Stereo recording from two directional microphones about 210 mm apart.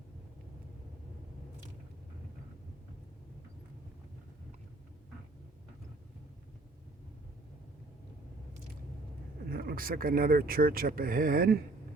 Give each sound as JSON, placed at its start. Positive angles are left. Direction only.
{"t": 9.5, "sound": "speech", "side_deg": -45}